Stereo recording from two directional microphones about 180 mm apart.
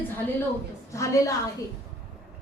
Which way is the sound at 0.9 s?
15° left (ahead or behind).